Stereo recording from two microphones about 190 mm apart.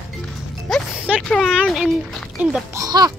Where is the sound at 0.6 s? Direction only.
Centre (ahead or behind).